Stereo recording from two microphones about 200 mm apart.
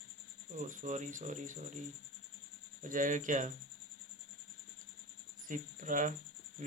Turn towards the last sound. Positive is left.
turn(degrees=-40)  # may be behind; listen again after turning